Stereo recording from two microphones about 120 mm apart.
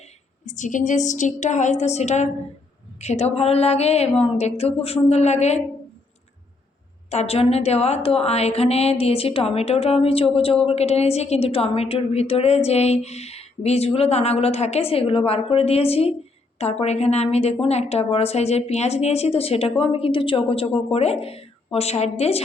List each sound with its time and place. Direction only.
0.4 s a woman's voice: 85° left; by 5.6 s 70° left (ahead or behind)
7.1 s a woman's voice: 60° left (ahead or behind)